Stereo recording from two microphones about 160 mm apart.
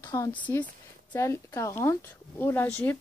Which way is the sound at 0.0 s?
25° left (ahead or behind).